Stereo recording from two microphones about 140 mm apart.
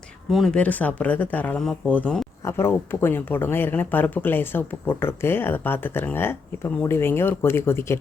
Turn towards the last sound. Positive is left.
turn(degrees=15)  # may be behind; listen again after turning